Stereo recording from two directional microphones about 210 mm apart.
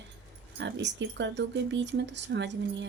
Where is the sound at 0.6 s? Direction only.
55° right (ahead or behind).